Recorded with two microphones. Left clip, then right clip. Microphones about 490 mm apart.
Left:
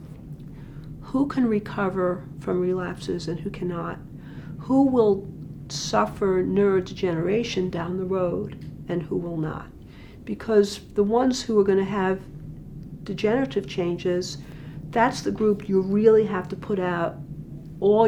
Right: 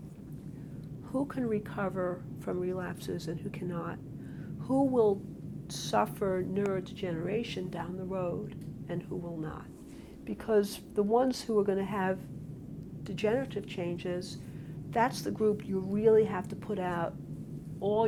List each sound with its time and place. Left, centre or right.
1.1 s speech: right
14.9 s speech: right